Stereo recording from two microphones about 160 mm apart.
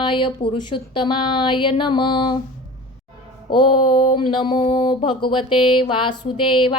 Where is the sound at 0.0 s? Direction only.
30° left (ahead or behind).